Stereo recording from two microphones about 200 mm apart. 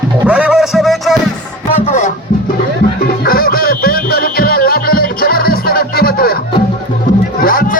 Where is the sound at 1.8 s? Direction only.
35° left (ahead or behind).